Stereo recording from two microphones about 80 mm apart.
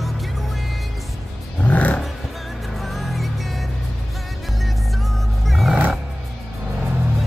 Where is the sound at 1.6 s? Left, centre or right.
Centre.